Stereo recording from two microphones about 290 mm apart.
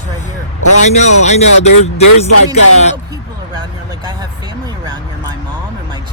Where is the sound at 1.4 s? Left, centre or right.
Left.